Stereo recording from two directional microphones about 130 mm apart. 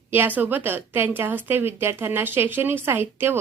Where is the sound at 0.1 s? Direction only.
15° right (ahead or behind).